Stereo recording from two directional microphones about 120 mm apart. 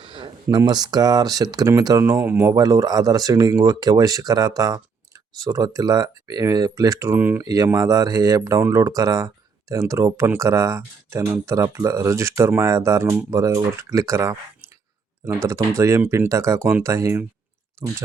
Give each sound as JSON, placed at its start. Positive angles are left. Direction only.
{"t": 0.0, "sound": "a sound", "side_deg": -40}
{"t": 0.5, "sound": "speech", "side_deg": -35}
{"t": 7.2, "sound": "speech", "side_deg": -15}
{"t": 7.4, "sound": "speech", "side_deg": -30}
{"t": 15.4, "sound": "speech", "side_deg": -25}